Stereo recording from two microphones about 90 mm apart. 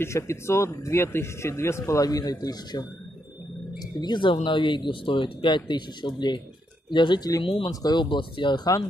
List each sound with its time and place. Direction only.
0.0 s speech: 30° left (ahead or behind)
4.0 s speech: 60° left (ahead or behind)
7.4 s speech: 90° left
7.8 s speech: 55° left (ahead or behind)